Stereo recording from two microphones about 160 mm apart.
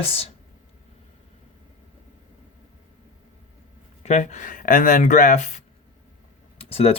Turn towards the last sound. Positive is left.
turn(degrees=40)  # may be behind; listen again after turning